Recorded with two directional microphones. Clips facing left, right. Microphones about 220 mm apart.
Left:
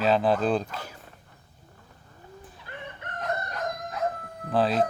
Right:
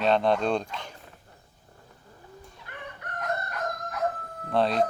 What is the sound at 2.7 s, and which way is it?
Crowing, 30° left (ahead or behind).